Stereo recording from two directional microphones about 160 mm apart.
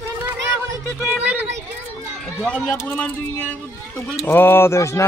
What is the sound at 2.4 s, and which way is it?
Speech, 5° left (ahead or behind).